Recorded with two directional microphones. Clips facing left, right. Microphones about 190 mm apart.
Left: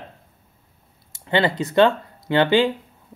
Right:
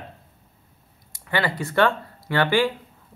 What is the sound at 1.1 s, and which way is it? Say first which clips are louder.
Speech: left 5 dB; 25° left (ahead or behind).